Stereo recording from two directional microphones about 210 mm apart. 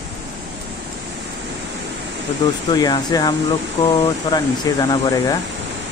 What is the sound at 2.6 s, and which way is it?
Speech, 20° left (ahead or behind).